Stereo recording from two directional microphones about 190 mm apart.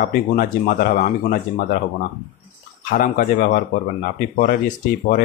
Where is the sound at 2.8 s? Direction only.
50° left (ahead or behind).